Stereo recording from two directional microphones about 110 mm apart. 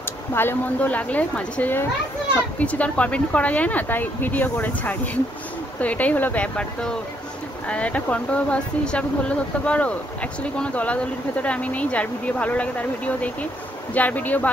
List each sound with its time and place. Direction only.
0.3 s speech: 20° left (ahead or behind)